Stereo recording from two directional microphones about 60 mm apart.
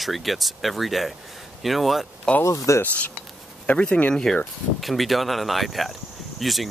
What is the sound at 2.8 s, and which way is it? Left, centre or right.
Speech, left.